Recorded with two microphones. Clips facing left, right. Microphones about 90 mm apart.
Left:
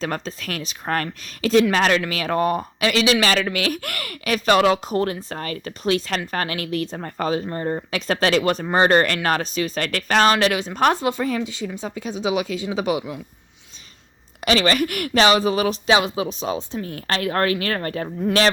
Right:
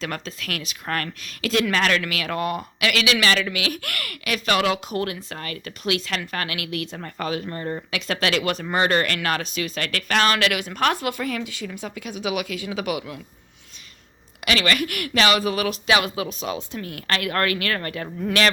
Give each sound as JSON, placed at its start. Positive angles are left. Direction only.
{"t": 0.0, "sound": "speech", "side_deg": 35}
{"t": 14.4, "sound": "speech", "side_deg": 30}